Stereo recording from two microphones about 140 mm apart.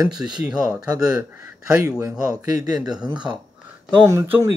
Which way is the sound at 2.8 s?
5° right (ahead or behind).